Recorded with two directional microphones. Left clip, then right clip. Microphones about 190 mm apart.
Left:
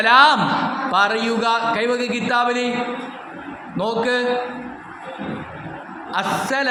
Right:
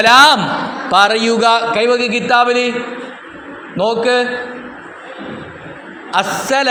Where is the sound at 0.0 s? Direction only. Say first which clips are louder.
Right 5 dB; 30° right (ahead or behind).